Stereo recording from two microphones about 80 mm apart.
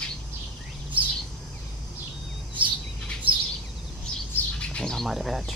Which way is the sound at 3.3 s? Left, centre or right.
Right.